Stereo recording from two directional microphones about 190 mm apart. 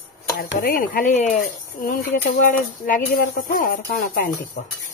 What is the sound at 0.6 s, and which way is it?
Speech, 50° left (ahead or behind).